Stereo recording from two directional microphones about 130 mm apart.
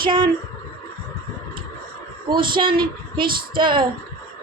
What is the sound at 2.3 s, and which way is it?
A woman's voice, 40° right (ahead or behind).